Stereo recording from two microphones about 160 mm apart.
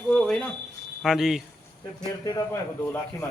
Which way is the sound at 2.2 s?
20° left (ahead or behind).